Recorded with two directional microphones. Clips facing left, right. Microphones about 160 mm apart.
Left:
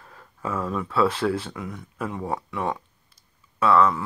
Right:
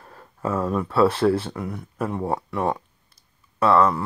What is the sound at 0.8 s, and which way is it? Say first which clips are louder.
Speech: right 3 dB; 10° right (ahead or behind).